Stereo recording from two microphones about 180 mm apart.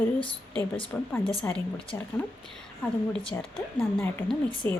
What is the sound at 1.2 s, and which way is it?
Speech, 30° left (ahead or behind).